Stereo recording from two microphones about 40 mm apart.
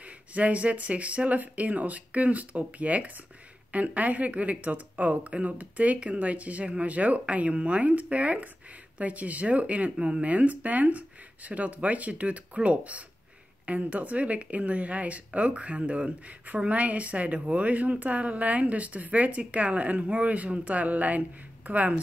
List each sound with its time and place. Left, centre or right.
0.0 s a woman's voice: right
10.2 s a woman's voice: right